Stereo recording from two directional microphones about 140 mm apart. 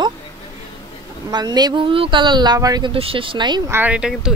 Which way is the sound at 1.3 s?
30° right (ahead or behind).